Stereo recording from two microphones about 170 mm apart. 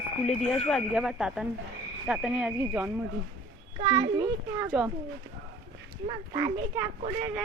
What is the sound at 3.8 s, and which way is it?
Speech, 25° right (ahead or behind).